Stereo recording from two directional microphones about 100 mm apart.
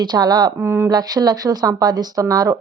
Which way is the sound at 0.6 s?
25° right (ahead or behind).